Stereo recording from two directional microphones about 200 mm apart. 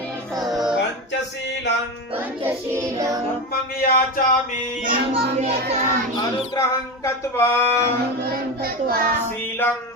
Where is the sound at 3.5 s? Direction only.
50° left (ahead or behind).